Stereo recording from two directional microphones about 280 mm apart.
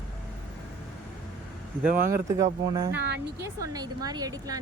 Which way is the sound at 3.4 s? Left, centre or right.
Centre.